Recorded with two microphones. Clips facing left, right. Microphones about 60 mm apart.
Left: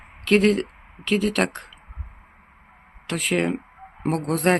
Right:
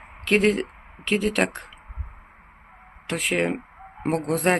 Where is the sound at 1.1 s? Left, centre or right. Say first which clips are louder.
Left 1 dB; centre.